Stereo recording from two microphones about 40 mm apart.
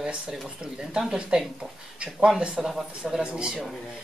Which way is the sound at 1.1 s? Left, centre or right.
Right.